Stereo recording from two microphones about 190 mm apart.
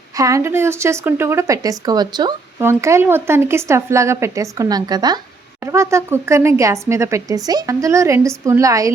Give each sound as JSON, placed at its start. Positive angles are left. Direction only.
{"t": 0.2, "sound": "a woman's voice", "side_deg": -15}